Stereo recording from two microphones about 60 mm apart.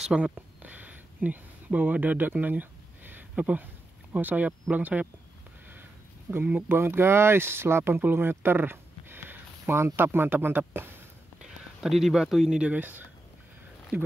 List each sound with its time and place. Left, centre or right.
0.1 s a sound: right
4.1 s speech: right
6.3 s speech: right
11.8 s speech: centre
12.5 s speech: right